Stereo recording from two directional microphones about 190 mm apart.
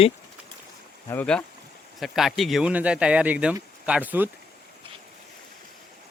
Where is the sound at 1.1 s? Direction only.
5° left (ahead or behind); by 4.3 s 10° right (ahead or behind).